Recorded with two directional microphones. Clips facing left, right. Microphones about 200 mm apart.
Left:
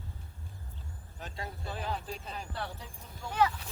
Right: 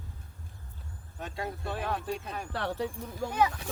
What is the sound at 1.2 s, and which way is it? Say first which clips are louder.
Speech: right 5 dB; 60° right (ahead or behind).